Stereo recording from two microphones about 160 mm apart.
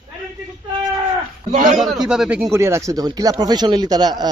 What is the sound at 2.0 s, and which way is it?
Speech, 5° right (ahead or behind).